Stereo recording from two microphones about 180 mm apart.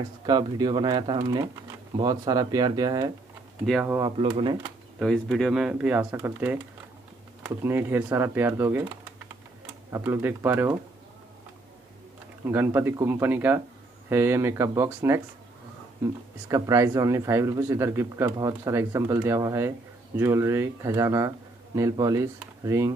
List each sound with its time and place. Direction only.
0.3 s speech: 25° right (ahead or behind)
4.9 s speech: centre (ahead or behind)
12.4 s speech: 10° right (ahead or behind)
16.4 s speech: 20° right (ahead or behind)